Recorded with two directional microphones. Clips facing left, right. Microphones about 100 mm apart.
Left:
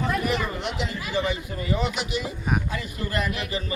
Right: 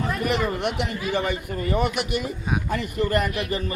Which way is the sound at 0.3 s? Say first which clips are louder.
Right 3 dB; 60° right (ahead or behind).